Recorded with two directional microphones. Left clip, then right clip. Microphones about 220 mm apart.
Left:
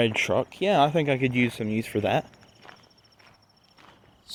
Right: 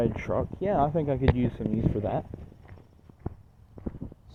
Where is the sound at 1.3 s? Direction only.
55° left (ahead or behind).